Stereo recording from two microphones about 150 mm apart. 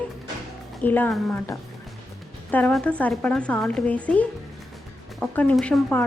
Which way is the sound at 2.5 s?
10° left (ahead or behind).